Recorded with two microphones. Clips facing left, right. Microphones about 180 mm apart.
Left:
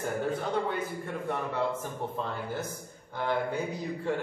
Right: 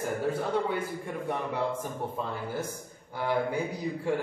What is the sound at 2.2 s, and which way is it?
Speech, 10° right (ahead or behind).